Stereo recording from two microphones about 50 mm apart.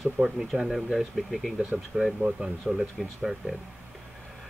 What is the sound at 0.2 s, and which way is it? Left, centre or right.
Speech, centre.